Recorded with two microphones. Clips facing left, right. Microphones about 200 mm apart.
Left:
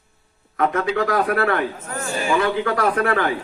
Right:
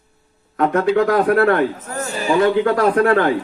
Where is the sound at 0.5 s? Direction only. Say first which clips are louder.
Right 5 dB; 50° right (ahead or behind).